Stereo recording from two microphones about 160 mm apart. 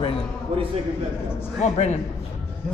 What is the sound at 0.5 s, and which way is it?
Speech, 35° right (ahead or behind).